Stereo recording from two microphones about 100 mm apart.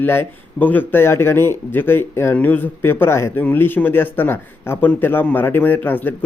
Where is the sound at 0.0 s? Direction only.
20° left (ahead or behind).